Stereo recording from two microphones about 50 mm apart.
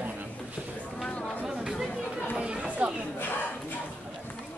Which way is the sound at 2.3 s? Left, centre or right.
Right.